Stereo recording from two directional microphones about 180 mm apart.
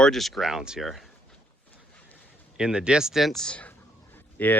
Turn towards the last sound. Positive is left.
turn(degrees=10)  # may be behind; listen again after turning